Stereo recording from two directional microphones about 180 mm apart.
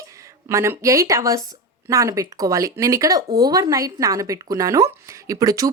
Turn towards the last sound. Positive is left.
turn(degrees=-20)  # may be behind; listen again after turning